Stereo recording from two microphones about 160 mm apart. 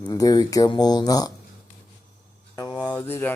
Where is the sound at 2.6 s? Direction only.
25° left (ahead or behind).